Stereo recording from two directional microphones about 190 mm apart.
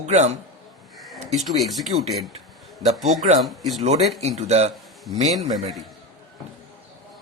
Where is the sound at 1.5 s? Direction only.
Centre (ahead or behind).